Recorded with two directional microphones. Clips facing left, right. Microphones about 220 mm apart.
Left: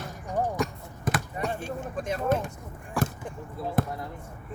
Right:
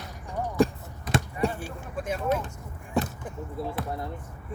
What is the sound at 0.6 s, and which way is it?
Basketball bounce, 30° right (ahead or behind).